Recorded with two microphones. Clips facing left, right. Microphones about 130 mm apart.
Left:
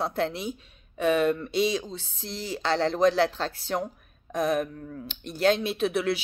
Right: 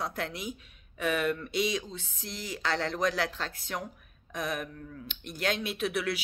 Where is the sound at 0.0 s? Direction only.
30° left (ahead or behind).